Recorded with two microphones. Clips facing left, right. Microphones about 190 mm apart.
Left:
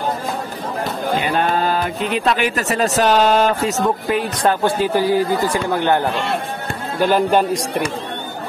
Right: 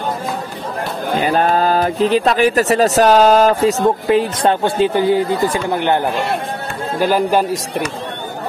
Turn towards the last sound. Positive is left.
turn(degrees=-5)  # may be behind; listen again after turning